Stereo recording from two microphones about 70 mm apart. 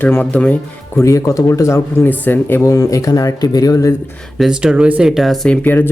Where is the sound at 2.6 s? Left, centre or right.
Left.